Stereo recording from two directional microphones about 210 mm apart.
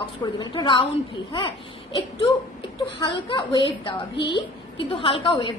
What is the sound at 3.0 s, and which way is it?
A woman's voice, 25° left (ahead or behind).